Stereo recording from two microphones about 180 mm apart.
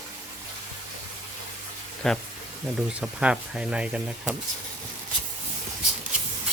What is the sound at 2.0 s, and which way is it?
Speech, 5° left (ahead or behind).